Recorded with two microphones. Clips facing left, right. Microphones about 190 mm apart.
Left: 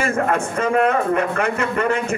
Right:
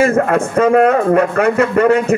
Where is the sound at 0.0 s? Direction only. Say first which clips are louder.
Right 7 dB; 45° right (ahead or behind).